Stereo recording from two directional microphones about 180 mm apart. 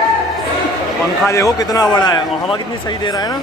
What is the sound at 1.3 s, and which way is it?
A man's voice, 20° left (ahead or behind).